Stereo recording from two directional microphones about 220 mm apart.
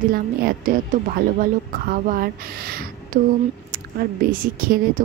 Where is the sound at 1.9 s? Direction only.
40° right (ahead or behind).